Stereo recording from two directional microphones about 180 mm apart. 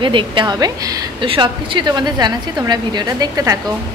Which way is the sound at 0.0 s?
25° right (ahead or behind).